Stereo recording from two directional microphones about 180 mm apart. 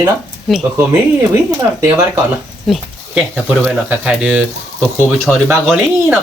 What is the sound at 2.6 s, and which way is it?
Speech, centre (ahead or behind).